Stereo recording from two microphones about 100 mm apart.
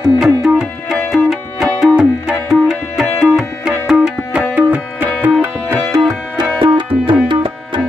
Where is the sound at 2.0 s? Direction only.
5° right (ahead or behind).